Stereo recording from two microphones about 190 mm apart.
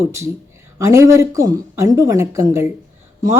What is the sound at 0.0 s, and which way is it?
A woman's voice, 15° right (ahead or behind).